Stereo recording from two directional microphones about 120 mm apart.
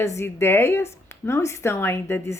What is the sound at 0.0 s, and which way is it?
A woman's voice, 25° left (ahead or behind).